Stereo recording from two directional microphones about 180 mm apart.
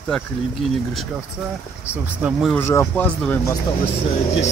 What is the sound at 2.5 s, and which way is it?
A man's voice, 15° left (ahead or behind).